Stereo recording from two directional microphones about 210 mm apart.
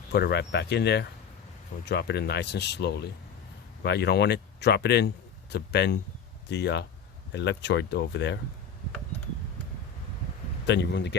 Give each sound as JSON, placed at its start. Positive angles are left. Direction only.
{"t": 0.1, "sound": "speech", "side_deg": 50}
{"t": 10.7, "sound": "speech", "side_deg": 55}